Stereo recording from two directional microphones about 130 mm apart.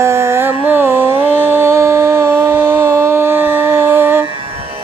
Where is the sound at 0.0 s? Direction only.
20° right (ahead or behind).